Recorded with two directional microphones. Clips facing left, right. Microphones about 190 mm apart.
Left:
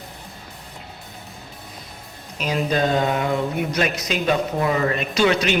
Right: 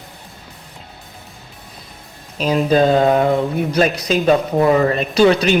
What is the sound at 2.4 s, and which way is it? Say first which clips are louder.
Speech: right 7 dB; 35° right (ahead or behind).